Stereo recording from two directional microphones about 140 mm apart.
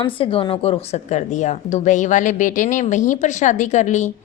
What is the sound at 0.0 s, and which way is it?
Speech, 40° left (ahead or behind).